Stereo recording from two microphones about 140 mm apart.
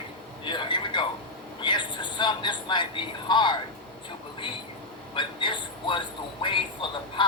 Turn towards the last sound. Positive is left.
turn(degrees=35)  # may be behind; listen again after turning